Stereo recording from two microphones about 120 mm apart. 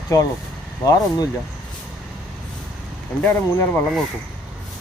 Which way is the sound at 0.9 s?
30° left (ahead or behind).